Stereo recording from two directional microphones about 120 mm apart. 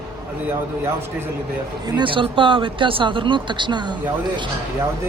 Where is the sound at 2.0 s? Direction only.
45° right (ahead or behind).